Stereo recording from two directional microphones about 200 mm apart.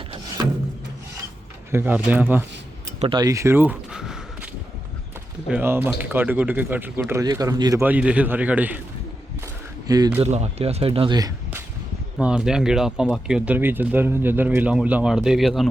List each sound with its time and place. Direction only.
1.7 s a man's voice: 10° right (ahead or behind)
3.0 s speech: 25° right (ahead or behind); by 4.2 s 5° right (ahead or behind)
5.5 s a man's voice: 10° right (ahead or behind)
9.8 s speech: 20° right (ahead or behind)
10.2 s speech: 35° right (ahead or behind)
12.1 s speech: 5° right (ahead or behind)